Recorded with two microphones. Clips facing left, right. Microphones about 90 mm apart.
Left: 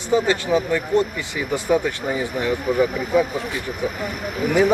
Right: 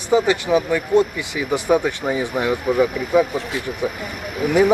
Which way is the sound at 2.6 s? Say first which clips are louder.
Right 1 dB; centre (ahead or behind).